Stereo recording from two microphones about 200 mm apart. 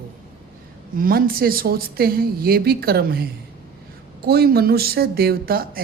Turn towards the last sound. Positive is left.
turn(degrees=-50)  # may be behind; listen again after turning